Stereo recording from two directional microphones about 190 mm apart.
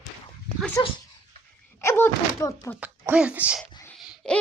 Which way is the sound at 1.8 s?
15° left (ahead or behind).